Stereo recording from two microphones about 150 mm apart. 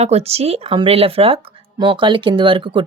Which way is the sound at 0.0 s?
45° right (ahead or behind).